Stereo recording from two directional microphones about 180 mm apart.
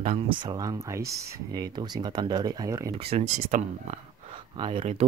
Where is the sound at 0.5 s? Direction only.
20° right (ahead or behind).